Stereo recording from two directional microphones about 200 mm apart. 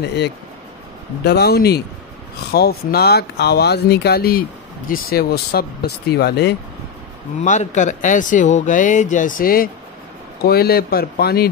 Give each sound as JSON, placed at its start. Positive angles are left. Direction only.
{"t": 1.2, "sound": "speech", "side_deg": 55}
{"t": 7.4, "sound": "speech", "side_deg": 40}